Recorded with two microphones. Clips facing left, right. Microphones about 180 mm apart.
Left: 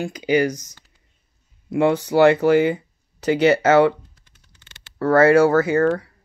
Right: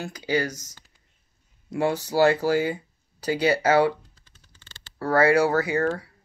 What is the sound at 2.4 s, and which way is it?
Speech, 60° left (ahead or behind).